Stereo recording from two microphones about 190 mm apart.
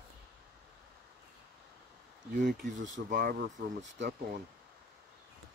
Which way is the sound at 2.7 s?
80° right.